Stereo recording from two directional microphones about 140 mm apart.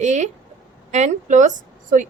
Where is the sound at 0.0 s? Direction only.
60° right (ahead or behind).